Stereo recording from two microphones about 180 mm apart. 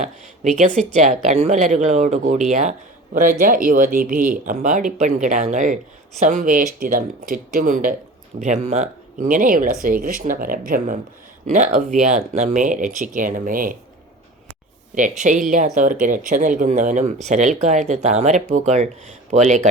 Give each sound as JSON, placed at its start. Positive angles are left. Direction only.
{"t": 0.0, "sound": "speech", "side_deg": -40}
{"t": 15.2, "sound": "speech", "side_deg": -45}